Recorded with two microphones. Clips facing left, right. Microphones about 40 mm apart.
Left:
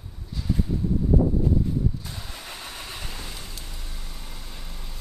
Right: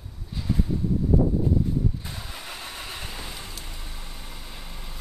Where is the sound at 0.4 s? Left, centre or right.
Centre.